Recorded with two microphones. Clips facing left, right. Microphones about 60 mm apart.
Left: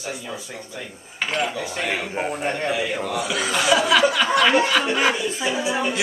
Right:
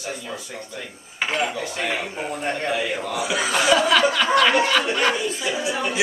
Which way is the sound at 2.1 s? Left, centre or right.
Left.